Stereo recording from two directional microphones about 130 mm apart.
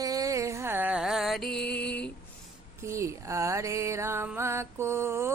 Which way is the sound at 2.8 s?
20° right (ahead or behind).